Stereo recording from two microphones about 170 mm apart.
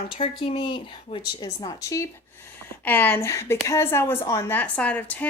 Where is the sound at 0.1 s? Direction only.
30° left (ahead or behind).